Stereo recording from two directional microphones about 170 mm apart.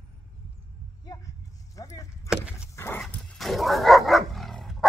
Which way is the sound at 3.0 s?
Centre (ahead or behind).